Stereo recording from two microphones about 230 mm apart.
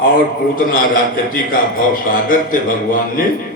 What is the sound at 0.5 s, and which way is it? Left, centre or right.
Mantra, left.